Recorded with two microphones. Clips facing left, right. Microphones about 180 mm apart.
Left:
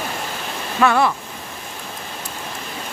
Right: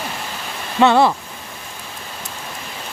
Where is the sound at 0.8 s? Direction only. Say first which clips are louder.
Right 4 dB; 30° right (ahead or behind).